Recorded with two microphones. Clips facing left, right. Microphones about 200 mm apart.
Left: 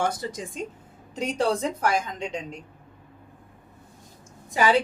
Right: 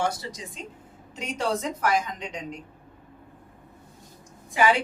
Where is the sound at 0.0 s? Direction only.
55° left (ahead or behind).